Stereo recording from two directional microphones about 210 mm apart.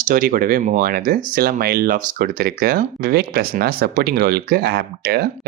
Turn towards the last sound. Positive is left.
turn(degrees=-50)  # may be behind; listen again after turning